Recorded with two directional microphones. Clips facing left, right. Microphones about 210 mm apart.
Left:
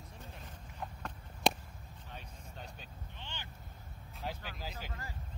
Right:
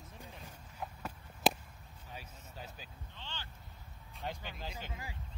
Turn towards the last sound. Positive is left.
turn(degrees=5)  # may be behind; listen again after turning